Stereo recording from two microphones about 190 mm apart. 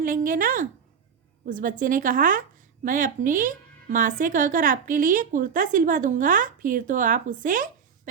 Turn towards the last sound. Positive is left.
turn(degrees=-45)  # may be behind; listen again after turning